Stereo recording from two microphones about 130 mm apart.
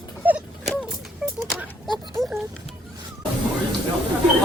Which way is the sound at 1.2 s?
10° right (ahead or behind).